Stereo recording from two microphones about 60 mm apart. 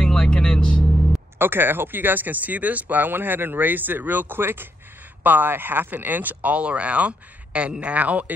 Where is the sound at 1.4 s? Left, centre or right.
Right.